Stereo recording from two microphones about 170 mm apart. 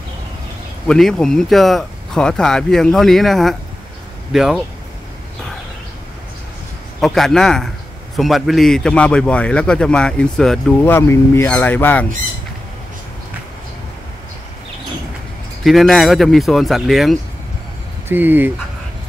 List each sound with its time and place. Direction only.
0.8 s a man's voice: 5° left (ahead or behind)
7.0 s a man's voice: centre (ahead or behind)
15.6 s a man's voice: centre (ahead or behind)
18.0 s speech: 10° right (ahead or behind)